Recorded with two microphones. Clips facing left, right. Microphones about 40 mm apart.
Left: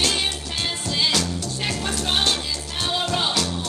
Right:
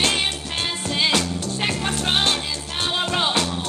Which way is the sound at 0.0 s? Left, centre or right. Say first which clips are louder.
Right 2 dB; right.